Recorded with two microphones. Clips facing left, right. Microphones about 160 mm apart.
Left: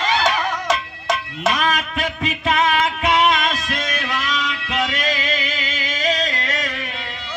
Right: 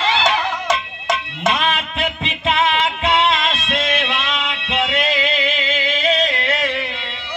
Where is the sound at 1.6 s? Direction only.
25° right (ahead or behind).